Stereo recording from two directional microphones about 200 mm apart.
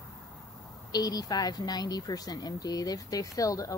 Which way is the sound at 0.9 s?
20° left (ahead or behind).